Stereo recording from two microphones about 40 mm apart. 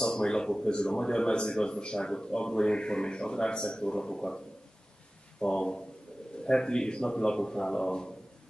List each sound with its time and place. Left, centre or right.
0.0 s speech: left
5.4 s speech: centre